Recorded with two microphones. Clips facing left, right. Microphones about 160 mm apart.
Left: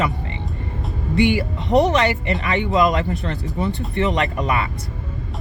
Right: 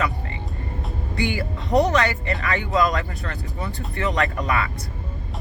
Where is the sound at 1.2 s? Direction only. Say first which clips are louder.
Left 8 dB; 25° left (ahead or behind).